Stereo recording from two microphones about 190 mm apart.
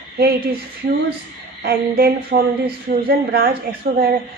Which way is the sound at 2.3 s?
55° right (ahead or behind).